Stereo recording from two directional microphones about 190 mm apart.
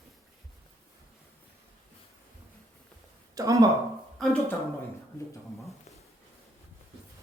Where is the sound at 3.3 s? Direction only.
15° right (ahead or behind).